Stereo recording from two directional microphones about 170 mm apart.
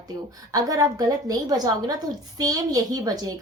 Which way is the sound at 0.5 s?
20° right (ahead or behind).